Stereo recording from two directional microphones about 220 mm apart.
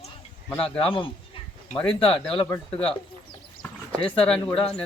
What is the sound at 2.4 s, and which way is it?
Speech, 25° left (ahead or behind).